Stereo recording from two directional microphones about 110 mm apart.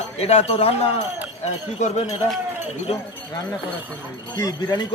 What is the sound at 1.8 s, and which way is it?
Speech, 80° left.